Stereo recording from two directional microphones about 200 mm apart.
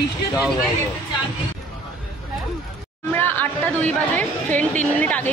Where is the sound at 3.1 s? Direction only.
10° left (ahead or behind).